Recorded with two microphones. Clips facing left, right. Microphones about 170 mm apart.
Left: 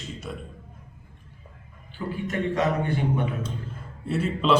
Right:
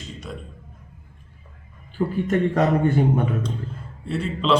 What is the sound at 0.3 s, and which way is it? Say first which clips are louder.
Speech: right 1 dB; centre (ahead or behind).